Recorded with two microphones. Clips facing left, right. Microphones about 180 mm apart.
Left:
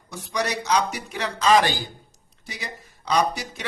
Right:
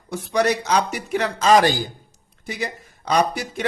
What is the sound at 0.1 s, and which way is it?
Speech, 55° right (ahead or behind).